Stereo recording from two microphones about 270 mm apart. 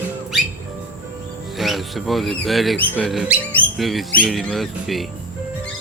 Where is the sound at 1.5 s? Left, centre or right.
Centre.